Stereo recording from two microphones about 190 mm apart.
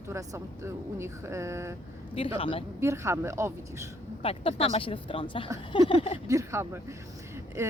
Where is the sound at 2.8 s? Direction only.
15° right (ahead or behind).